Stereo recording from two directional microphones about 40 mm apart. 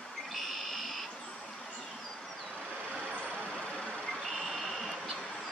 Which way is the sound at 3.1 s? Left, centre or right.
Left.